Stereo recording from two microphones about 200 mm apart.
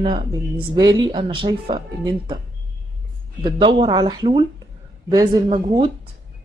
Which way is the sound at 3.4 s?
25° right (ahead or behind).